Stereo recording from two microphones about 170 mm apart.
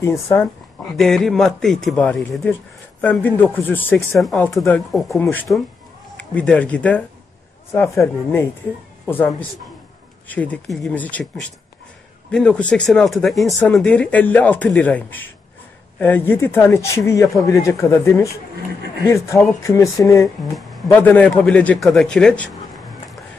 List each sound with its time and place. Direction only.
0.0 s speech: 15° left (ahead or behind)
0.9 s speech: centre (ahead or behind)